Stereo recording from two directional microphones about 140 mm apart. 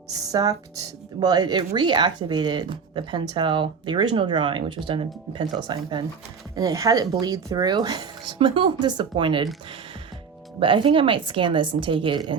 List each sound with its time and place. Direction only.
0.3 s speech: 25° right (ahead or behind)
10.6 s speech: 35° right (ahead or behind)